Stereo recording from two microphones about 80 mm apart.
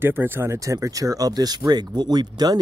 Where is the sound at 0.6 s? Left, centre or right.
Right.